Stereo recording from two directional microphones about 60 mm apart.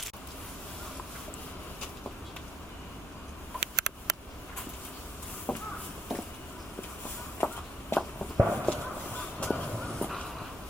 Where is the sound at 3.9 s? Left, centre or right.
Left.